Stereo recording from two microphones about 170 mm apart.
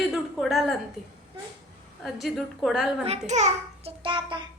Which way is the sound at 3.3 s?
40° right (ahead or behind).